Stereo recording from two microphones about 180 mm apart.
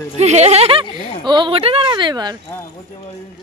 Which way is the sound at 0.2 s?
40° right (ahead or behind).